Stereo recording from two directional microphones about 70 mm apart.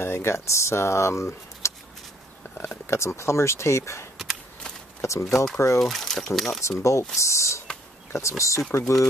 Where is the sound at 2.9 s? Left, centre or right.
Left.